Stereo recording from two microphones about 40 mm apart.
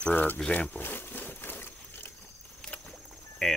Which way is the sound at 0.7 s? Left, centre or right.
Left.